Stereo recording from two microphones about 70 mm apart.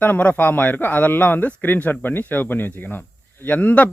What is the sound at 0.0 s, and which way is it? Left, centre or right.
A man's voice, left.